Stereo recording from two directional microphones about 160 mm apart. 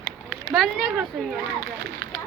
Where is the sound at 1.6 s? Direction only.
70° right (ahead or behind).